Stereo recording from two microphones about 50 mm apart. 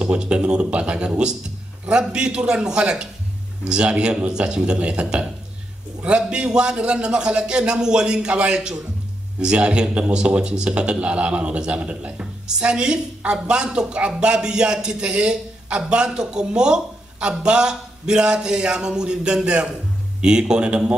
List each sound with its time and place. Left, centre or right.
0.0 s speech: centre